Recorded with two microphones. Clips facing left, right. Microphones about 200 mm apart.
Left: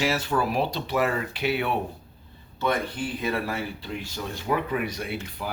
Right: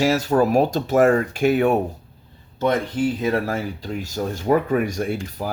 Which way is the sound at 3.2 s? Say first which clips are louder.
Right 6 dB; 45° right (ahead or behind).